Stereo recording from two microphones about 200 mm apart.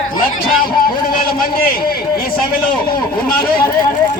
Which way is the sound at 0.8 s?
45° left (ahead or behind).